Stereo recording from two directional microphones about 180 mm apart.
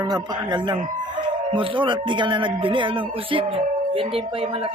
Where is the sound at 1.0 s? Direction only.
25° right (ahead or behind).